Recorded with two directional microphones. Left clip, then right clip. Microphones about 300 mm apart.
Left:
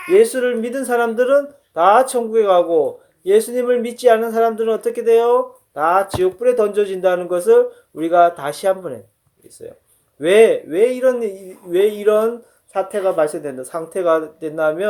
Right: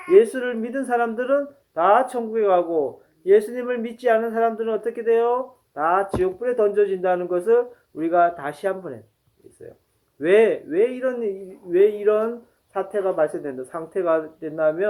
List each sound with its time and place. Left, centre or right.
0.1 s speech: left
10.2 s speech: left